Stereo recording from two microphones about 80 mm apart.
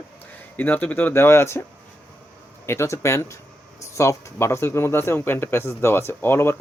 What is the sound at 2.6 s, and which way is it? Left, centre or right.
A man's voice, left.